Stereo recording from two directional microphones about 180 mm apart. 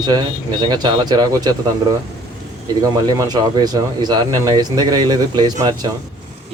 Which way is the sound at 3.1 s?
20° right (ahead or behind).